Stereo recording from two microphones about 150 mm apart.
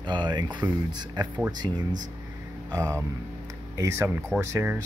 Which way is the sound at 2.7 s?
20° right (ahead or behind).